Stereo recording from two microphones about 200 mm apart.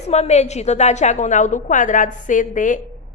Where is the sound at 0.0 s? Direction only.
35° left (ahead or behind).